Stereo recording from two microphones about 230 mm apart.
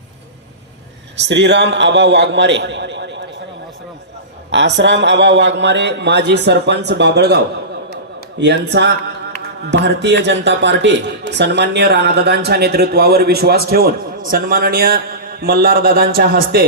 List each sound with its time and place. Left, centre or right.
1.2 s speech: right
4.5 s speech: right